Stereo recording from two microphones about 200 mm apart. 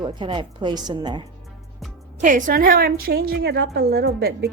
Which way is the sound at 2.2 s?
40° right (ahead or behind).